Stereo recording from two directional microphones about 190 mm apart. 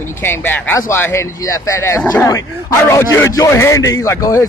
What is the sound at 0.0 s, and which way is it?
A man's voice, 10° left (ahead or behind).